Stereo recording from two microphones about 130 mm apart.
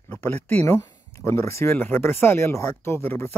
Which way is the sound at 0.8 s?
25° left (ahead or behind).